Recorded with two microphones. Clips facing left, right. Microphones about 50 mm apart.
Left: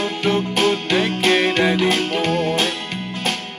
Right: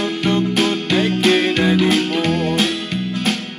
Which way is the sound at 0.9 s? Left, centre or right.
Left.